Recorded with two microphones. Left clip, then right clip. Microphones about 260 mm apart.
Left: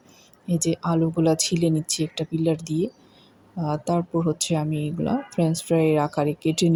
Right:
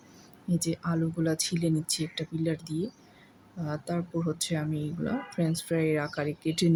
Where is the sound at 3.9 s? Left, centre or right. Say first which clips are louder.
Left 9 dB; centre.